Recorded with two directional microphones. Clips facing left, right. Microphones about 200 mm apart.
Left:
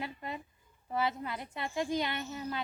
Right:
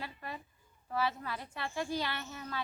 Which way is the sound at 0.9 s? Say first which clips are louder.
Left 1 dB; 20° left (ahead or behind).